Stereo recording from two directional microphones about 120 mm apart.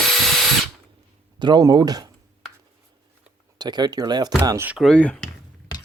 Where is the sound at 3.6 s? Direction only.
35° right (ahead or behind).